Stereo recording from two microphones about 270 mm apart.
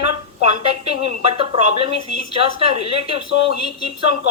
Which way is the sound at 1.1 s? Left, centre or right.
Right.